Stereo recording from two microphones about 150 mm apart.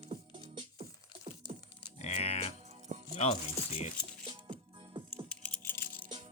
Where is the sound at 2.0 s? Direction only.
45° left (ahead or behind).